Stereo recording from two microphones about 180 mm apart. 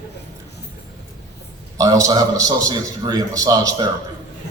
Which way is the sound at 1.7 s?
20° right (ahead or behind).